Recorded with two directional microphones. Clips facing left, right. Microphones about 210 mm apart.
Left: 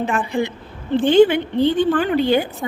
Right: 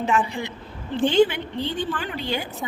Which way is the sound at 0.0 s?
55° left (ahead or behind).